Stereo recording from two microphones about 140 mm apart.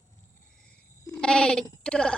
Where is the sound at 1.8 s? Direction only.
5° left (ahead or behind).